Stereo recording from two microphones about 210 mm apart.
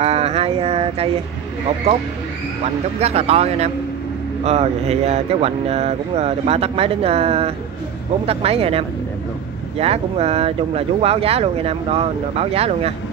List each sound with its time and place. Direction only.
0.0 s speech: 30° right (ahead or behind)
2.6 s speech: 30° right (ahead or behind)